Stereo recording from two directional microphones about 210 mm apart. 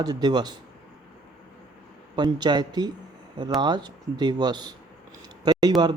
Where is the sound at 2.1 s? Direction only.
20° right (ahead or behind).